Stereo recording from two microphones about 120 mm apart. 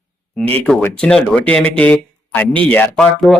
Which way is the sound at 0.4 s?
15° left (ahead or behind).